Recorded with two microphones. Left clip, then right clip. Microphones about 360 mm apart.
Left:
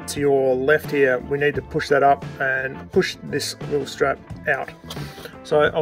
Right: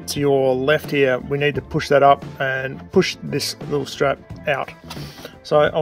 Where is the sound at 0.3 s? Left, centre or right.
Right.